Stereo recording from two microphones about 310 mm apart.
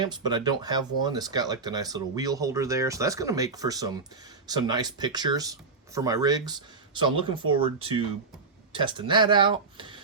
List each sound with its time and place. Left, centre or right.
0.0 s speech: centre